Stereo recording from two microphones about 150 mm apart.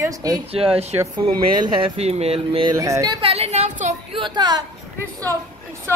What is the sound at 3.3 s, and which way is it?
Speech, 45° right (ahead or behind).